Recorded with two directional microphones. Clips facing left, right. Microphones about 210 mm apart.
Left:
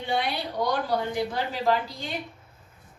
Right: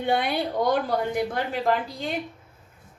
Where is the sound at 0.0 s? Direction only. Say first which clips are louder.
Right 4 dB; 55° right (ahead or behind).